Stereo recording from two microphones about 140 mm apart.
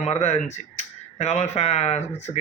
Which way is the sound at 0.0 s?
50° left (ahead or behind).